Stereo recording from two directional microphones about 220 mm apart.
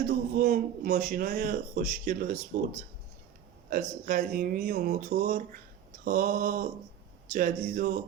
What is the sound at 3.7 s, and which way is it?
A man's voice, 40° right (ahead or behind).